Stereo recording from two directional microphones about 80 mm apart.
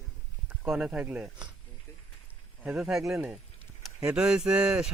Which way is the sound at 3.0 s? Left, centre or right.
Right.